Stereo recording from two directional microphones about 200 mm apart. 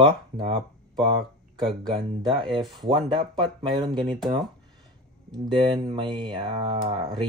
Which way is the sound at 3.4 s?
Centre (ahead or behind).